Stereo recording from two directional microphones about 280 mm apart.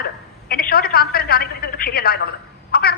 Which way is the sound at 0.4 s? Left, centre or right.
Left.